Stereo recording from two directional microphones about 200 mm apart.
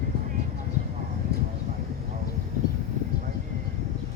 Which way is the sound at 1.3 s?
55° right (ahead or behind).